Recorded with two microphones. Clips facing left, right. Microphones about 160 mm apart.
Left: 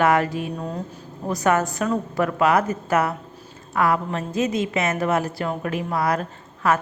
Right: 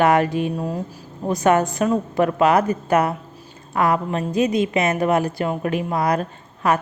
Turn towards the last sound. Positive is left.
turn(degrees=-20)  # may be behind; listen again after turning